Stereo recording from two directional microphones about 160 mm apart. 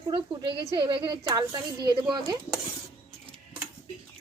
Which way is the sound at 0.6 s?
25° right (ahead or behind).